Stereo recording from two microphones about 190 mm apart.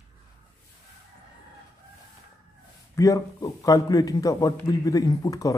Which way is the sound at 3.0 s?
15° left (ahead or behind).